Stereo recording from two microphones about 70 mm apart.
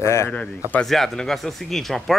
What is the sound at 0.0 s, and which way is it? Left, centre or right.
Speech, left.